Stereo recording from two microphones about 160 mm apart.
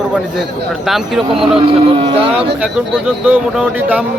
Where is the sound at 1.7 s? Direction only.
35° right (ahead or behind).